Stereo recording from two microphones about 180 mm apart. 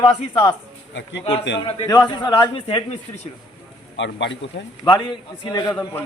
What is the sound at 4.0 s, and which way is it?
Speech, 90° left.